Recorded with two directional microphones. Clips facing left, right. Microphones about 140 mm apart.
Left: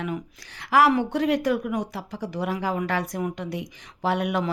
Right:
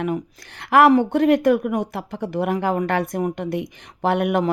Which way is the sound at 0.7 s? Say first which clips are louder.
Right 5 dB; 55° right (ahead or behind).